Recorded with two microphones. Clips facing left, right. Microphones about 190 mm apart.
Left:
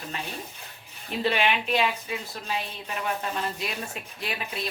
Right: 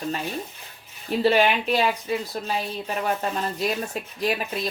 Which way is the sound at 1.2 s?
40° right (ahead or behind).